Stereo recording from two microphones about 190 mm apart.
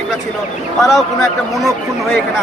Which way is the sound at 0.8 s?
Centre (ahead or behind).